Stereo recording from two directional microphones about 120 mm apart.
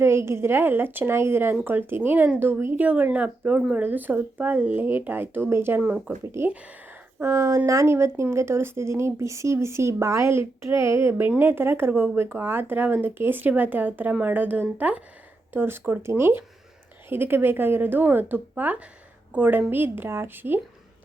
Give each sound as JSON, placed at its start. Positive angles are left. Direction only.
{"t": 0.0, "sound": "a woman's voice", "side_deg": -20}
{"t": 7.2, "sound": "a woman's voice", "side_deg": -25}